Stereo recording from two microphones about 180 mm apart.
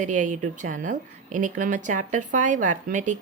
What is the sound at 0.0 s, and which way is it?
A woman's voice, 45° right (ahead or behind).